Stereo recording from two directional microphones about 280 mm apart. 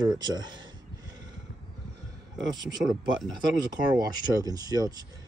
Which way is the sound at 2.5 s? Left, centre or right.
Centre.